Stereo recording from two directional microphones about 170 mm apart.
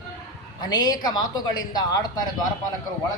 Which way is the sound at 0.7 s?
25° left (ahead or behind).